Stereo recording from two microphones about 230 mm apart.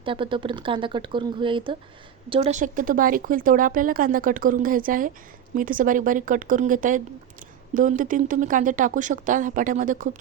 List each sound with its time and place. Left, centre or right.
0.0 s speech: right